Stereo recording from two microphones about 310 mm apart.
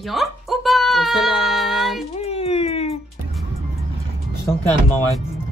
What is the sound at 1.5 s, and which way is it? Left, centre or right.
Speech, centre.